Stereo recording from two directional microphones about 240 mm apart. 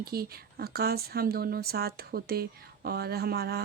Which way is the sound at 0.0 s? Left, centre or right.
Right.